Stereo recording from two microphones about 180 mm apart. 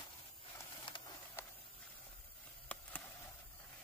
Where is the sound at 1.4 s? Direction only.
15° left (ahead or behind).